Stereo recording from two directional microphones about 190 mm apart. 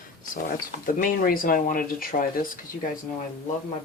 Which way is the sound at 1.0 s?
50° left (ahead or behind).